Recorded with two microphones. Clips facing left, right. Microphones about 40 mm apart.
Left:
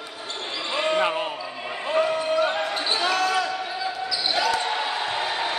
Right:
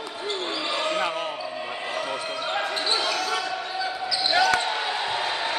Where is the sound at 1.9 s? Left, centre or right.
Left.